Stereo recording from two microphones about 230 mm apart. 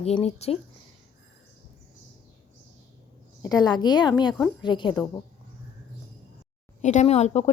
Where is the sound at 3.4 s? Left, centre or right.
Centre.